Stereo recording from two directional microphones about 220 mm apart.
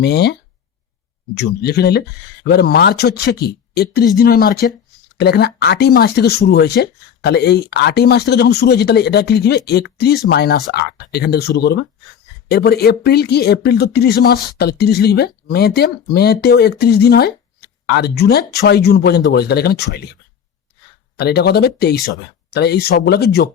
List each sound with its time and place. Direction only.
0.0 s speech: 50° left (ahead or behind)
1.4 s speech: 45° left (ahead or behind)
21.2 s speech: 45° left (ahead or behind)